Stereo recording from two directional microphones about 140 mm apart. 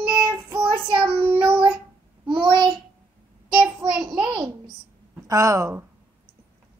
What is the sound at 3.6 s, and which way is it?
Child singing, 5° right (ahead or behind).